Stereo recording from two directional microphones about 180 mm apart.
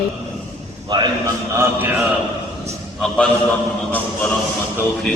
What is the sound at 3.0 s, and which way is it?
A man's voice, 5° left (ahead or behind).